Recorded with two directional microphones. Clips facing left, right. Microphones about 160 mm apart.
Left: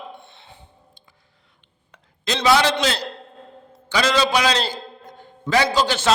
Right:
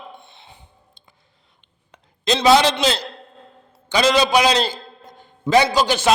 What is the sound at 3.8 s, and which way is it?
Speech, 20° right (ahead or behind).